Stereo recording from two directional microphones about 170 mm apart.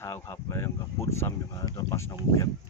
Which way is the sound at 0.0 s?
15° left (ahead or behind).